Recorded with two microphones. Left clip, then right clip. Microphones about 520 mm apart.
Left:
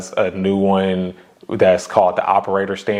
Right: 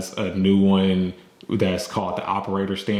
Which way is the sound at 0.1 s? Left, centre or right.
Left.